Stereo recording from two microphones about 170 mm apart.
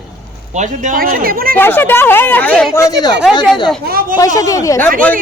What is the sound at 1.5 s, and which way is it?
Speech, 10° left (ahead or behind).